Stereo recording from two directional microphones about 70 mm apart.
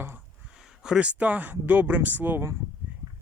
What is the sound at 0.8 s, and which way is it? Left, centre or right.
Speech, centre.